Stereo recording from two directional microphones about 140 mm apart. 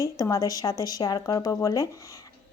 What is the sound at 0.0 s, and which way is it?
A woman's voice, 25° left (ahead or behind).